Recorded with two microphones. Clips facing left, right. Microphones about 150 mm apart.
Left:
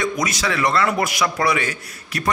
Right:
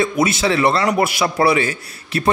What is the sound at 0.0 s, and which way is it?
A man's voice, 25° right (ahead or behind).